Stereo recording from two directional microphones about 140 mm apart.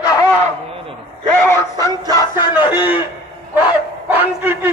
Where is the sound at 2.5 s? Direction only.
15° right (ahead or behind).